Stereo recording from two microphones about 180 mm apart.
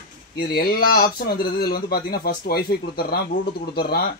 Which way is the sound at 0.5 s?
55° left (ahead or behind).